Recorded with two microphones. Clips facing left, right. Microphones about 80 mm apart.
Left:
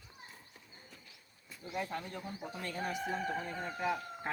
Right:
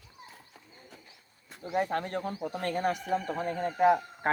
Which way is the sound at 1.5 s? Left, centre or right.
Right.